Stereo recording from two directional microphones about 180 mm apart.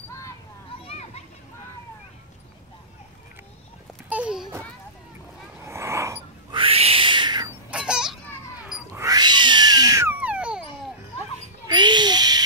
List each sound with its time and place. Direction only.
0.8 s children playing: 35° left (ahead or behind)
4.1 s a sound: 5° right (ahead or behind)
5.7 s a sound: 15° right (ahead or behind)
6.5 s owl: 30° right (ahead or behind)
7.7 s children playing: 5° right (ahead or behind)
8.6 s cat: 5° right (ahead or behind)
9.0 s cat: 25° right (ahead or behind); by 10.6 s 5° right (ahead or behind)
11.6 s babbling: 25° right (ahead or behind)